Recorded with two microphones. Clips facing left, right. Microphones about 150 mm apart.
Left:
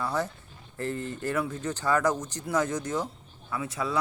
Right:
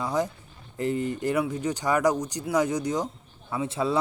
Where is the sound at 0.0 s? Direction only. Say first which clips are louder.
Right 3 dB; 15° right (ahead or behind).